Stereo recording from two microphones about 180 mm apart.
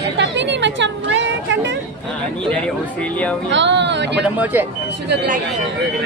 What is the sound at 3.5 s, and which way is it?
Speech, 80° right.